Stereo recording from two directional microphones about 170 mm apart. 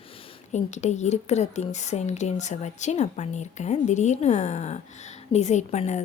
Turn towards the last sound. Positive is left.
turn(degrees=45)  # may be behind; listen again after turning